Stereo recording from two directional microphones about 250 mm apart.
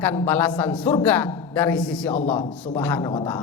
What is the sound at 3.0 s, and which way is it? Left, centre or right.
Speech, centre.